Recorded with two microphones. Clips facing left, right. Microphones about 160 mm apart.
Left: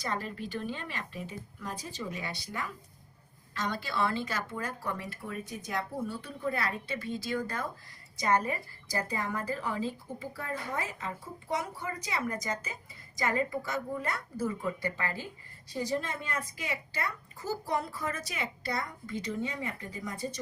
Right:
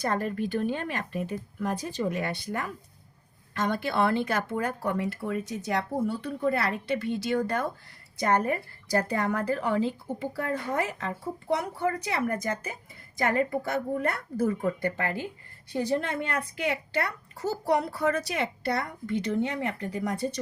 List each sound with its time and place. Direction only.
0.0 s a woman's voice: 50° right (ahead or behind); by 20.4 s 70° right (ahead or behind)